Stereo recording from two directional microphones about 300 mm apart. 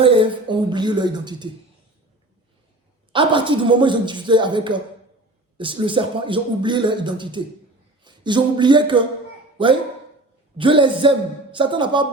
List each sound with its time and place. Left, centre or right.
0.0 s speech: centre
3.1 s speech: centre
8.0 s a sound: centre
10.6 s speech: centre